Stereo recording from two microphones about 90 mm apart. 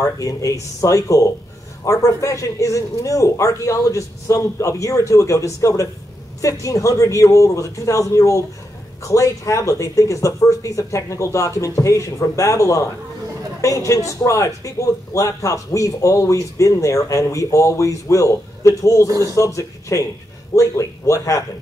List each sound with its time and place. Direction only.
0.0 s a man's voice: 35° left (ahead or behind)
19.0 s speech: 40° right (ahead or behind)
19.3 s a man's voice: 35° left (ahead or behind)